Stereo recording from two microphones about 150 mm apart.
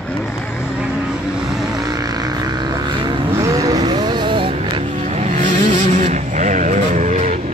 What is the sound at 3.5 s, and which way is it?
Vehicle, 25° right (ahead or behind).